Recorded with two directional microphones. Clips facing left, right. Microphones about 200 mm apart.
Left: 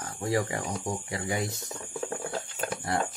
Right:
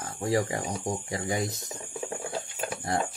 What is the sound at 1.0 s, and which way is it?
Speech, 25° right (ahead or behind).